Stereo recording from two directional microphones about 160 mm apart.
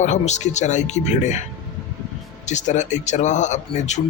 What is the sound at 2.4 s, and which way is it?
Speech, 50° left (ahead or behind).